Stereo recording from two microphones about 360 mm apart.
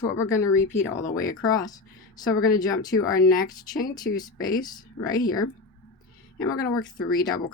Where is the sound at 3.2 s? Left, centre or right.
Left.